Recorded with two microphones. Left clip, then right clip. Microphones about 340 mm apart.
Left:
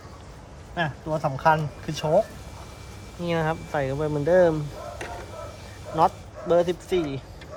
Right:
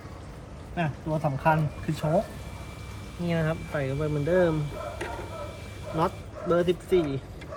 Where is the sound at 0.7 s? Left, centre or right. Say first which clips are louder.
Left 3 dB; centre.